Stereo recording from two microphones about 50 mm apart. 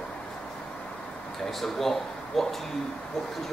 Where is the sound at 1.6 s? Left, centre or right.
Centre.